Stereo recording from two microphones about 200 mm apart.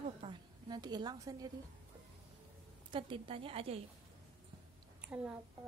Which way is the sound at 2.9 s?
25° right (ahead or behind).